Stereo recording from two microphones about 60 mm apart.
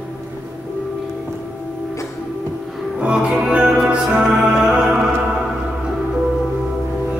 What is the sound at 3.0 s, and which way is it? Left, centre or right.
Music, centre.